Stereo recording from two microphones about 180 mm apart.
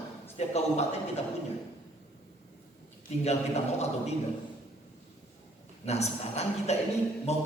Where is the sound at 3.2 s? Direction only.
35° left (ahead or behind).